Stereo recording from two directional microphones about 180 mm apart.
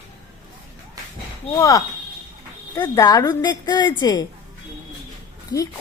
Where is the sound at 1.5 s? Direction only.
20° left (ahead or behind).